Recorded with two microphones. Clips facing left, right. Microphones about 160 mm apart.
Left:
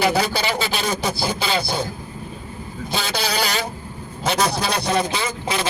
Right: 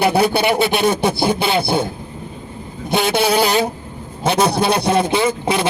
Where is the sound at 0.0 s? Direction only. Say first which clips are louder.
Right 5 dB; 60° right (ahead or behind).